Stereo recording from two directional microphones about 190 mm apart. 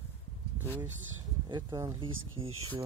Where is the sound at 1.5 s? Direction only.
20° right (ahead or behind).